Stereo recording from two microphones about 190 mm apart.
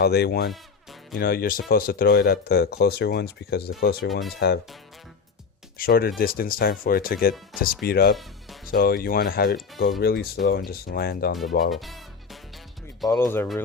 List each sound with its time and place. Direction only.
0.0 s speech: 60° left (ahead or behind)
5.7 s speech: 50° left (ahead or behind)
11.7 s music: centre (ahead or behind)
13.1 s speech: 10° left (ahead or behind)